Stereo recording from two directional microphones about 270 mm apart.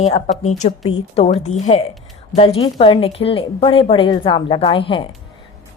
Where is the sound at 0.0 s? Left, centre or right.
Left.